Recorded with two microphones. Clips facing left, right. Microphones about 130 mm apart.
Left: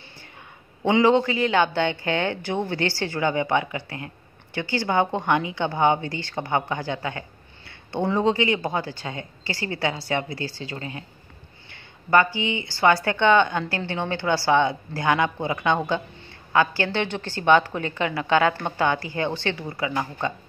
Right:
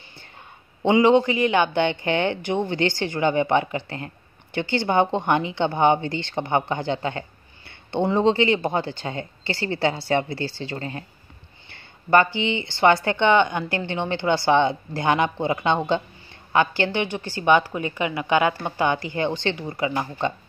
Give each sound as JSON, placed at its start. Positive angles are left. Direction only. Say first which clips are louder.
{"t": 0.9, "sound": "speech", "louder": "right 2 dB", "side_deg": -20}
{"t": 11.7, "sound": "a woman's voice", "louder": "right 1 dB", "side_deg": -25}